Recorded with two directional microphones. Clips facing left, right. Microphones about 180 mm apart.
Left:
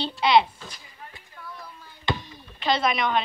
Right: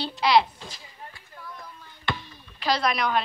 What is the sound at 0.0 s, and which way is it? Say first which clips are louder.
Speech: left 1 dB; centre (ahead or behind).